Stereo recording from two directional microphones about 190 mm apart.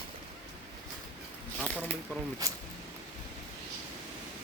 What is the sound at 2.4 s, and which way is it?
Speech, 20° right (ahead or behind).